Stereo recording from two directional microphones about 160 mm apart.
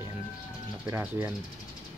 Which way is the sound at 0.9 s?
15° right (ahead or behind).